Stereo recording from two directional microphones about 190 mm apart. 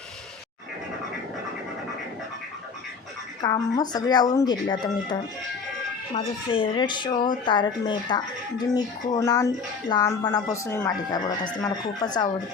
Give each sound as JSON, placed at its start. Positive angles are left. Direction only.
{"t": 3.4, "sound": "speech", "side_deg": 20}
{"t": 6.1, "sound": "speech", "side_deg": 25}